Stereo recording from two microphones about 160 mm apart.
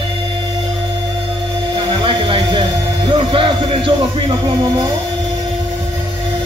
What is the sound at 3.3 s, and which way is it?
Music, 30° right (ahead or behind).